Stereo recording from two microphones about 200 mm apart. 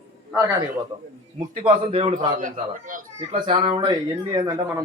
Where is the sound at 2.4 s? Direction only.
40° right (ahead or behind).